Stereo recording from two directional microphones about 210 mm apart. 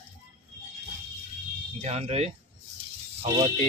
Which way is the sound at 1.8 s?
30° right (ahead or behind).